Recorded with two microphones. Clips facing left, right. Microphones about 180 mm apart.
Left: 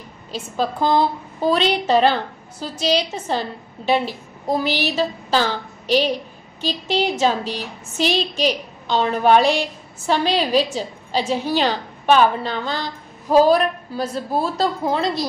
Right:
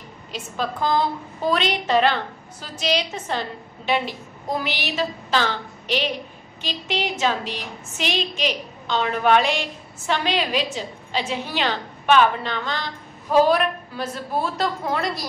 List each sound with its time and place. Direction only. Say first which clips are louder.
0.3 s a woman's voice: left 4 dB; 30° left (ahead or behind)